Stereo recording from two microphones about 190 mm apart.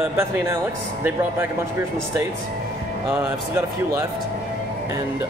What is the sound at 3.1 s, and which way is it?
Speech, 10° right (ahead or behind).